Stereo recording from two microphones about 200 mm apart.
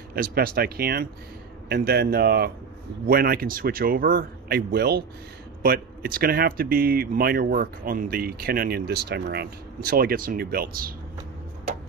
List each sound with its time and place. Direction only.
0.1 s speech: 50° right (ahead or behind)